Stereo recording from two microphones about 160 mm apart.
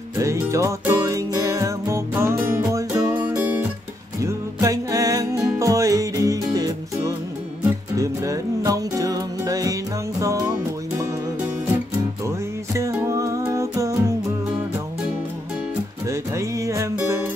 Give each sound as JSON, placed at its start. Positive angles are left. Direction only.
{"t": 0.2, "sound": "music", "side_deg": -20}
{"t": 12.3, "sound": "music", "side_deg": -20}
{"t": 16.1, "sound": "music", "side_deg": -20}